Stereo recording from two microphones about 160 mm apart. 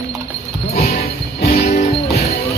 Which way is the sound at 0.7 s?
70° left (ahead or behind).